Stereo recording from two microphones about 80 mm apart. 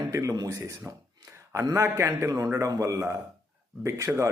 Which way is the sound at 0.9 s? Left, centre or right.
Right.